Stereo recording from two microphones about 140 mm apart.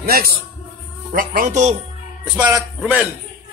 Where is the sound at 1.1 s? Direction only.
75° right (ahead or behind).